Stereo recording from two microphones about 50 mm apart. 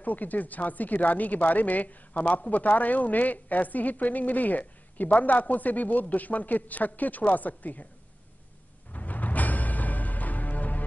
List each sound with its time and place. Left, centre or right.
0.0 s a woman's voice: left
8.9 s music: left